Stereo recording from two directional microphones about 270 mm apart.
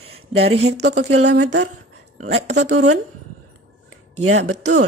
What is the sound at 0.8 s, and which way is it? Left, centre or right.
Speech, right.